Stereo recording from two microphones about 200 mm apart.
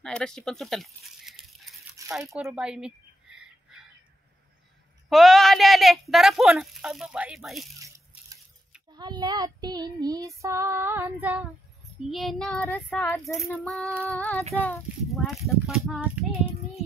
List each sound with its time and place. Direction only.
0.0 s speech: 5° left (ahead or behind)
2.0 s a sound: 15° right (ahead or behind)
5.1 s speech: centre (ahead or behind)
8.9 s child singing: 20° right (ahead or behind)
12.1 s speech: centre (ahead or behind)